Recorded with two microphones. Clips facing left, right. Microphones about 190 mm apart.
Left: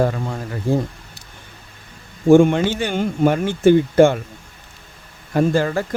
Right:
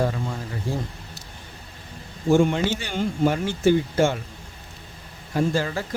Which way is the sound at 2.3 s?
55° left (ahead or behind).